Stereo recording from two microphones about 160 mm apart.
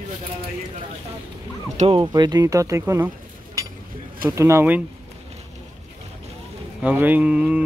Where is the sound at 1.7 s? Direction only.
35° right (ahead or behind).